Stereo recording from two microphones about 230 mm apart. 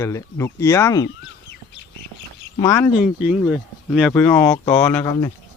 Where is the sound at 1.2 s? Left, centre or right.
Left.